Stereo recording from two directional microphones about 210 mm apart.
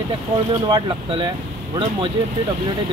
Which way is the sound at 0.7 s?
20° right (ahead or behind).